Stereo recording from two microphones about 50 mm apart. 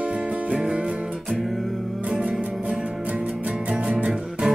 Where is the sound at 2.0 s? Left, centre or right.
Centre.